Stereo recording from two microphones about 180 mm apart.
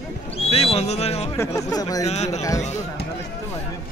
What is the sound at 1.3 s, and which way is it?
Speech, 20° left (ahead or behind).